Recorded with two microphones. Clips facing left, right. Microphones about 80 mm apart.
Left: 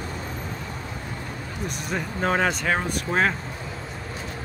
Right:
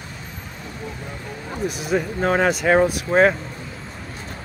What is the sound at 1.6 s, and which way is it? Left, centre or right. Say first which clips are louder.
Speech: right 8 dB; centre.